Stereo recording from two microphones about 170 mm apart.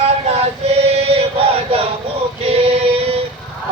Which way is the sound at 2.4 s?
35° right (ahead or behind).